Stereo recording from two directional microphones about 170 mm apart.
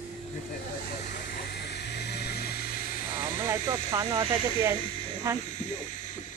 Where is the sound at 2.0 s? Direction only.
75° left (ahead or behind).